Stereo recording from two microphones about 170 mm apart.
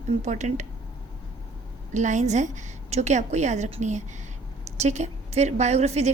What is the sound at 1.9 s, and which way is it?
A woman's voice, 45° right (ahead or behind).